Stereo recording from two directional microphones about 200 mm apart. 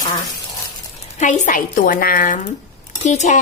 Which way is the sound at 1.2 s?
40° left (ahead or behind).